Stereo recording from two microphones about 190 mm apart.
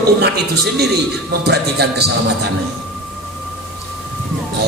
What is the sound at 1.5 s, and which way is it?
Speech, 60° right (ahead or behind).